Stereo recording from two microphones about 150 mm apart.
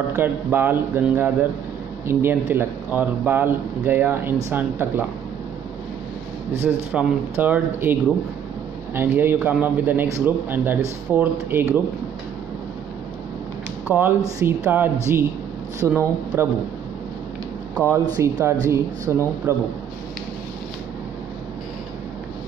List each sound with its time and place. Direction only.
0.1 s a man's voice: 15° right (ahead or behind)
6.5 s a man's voice: 10° right (ahead or behind)
13.9 s a man's voice: 15° right (ahead or behind)
18.1 s a man's voice: 20° right (ahead or behind)